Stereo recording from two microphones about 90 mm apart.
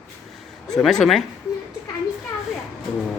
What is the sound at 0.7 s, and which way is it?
Speech, 5° left (ahead or behind).